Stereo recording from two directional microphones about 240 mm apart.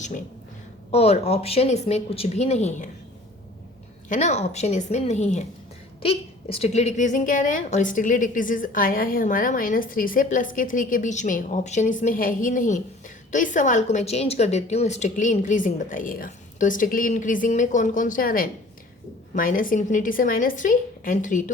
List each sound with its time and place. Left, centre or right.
0.9 s speech: left
4.1 s a woman's voice: left